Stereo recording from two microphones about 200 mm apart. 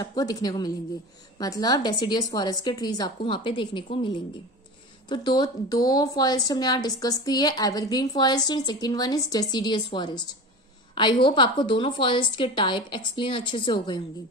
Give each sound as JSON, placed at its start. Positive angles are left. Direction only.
{"t": 0.0, "sound": "a woman's voice", "side_deg": 20}
{"t": 11.2, "sound": "a woman's voice", "side_deg": 25}